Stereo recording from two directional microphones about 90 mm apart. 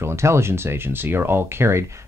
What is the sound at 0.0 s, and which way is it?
Speech, 30° right (ahead or behind).